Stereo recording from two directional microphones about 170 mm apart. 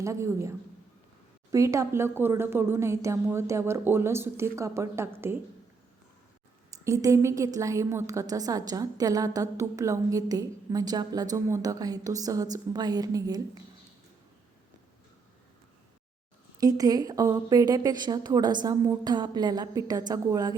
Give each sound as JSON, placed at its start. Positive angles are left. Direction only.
{"t": 0.0, "sound": "a woman's voice", "side_deg": -15}
{"t": 6.7, "sound": "a woman's voice", "side_deg": -20}
{"t": 16.6, "sound": "a woman's voice", "side_deg": -20}